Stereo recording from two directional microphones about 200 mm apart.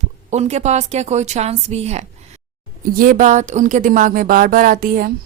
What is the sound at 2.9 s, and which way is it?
Speech, 45° right (ahead or behind).